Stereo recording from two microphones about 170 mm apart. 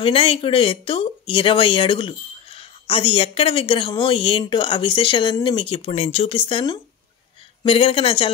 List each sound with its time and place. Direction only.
0.0 s speech: 35° left (ahead or behind)